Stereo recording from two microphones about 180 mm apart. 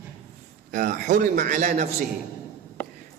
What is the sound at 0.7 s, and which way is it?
A man's voice, 50° right (ahead or behind).